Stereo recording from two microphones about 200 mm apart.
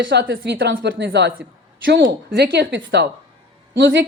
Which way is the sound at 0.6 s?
55° right (ahead or behind).